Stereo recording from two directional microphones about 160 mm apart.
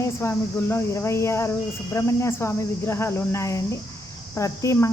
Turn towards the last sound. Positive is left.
turn(degrees=20)  # may be behind; listen again after turning